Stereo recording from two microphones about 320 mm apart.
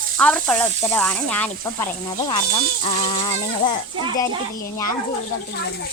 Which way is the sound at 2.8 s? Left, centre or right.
Left.